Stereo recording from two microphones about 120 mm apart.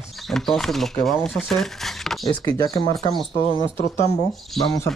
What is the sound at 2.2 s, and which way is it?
Speech, 35° left (ahead or behind).